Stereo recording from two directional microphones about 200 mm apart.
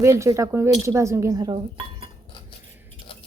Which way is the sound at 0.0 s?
15° right (ahead or behind).